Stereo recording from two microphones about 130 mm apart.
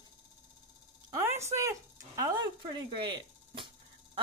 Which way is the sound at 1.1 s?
20° right (ahead or behind).